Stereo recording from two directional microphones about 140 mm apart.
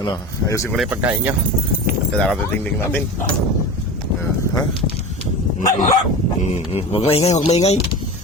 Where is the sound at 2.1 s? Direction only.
Centre (ahead or behind).